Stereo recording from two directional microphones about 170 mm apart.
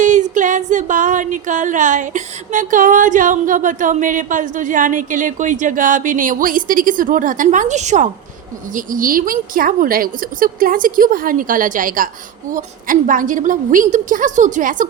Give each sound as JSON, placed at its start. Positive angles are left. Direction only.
{"t": 0.0, "sound": "female singing", "side_deg": -45}
{"t": 8.7, "sound": "a woman's voice", "side_deg": -55}
{"t": 12.5, "sound": "female singing", "side_deg": -50}